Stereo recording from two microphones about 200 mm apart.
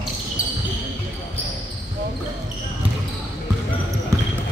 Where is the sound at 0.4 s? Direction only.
40° left (ahead or behind).